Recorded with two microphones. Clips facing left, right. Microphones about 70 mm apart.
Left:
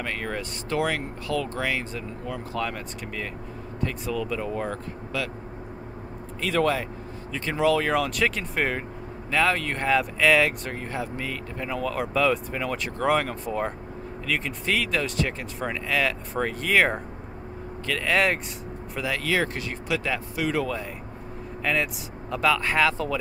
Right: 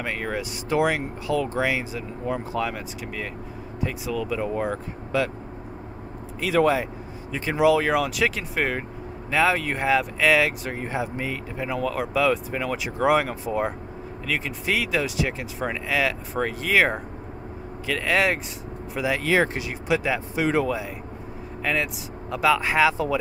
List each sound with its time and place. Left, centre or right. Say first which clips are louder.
0.0 s speech: right 2 dB; centre
5.1 s speech: right 6 dB; right
6.4 s speech: right 3 dB; centre
10.8 s speech: right 6 dB; centre
18.9 s speech: right 4 dB; centre
21.7 s speech: even; centre